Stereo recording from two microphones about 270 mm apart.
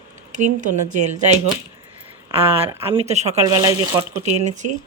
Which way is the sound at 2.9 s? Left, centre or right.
Right.